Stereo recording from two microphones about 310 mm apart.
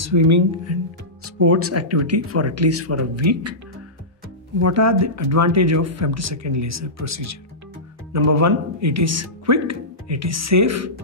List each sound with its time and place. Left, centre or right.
0.0 s speech: right
1.2 s speech: right
4.6 s speech: right